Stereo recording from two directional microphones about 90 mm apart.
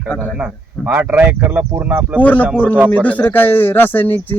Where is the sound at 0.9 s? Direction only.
20° right (ahead or behind).